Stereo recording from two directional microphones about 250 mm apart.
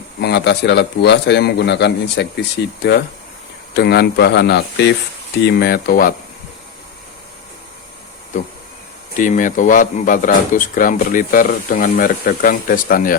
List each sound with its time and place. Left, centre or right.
0.2 s a man's voice: left
3.8 s speech: left
9.1 s speech: left